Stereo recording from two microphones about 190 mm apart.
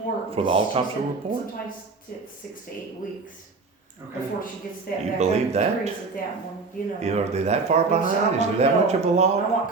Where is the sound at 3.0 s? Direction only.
45° left (ahead or behind).